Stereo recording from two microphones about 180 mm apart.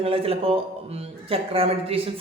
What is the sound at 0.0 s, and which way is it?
Speech, 30° right (ahead or behind).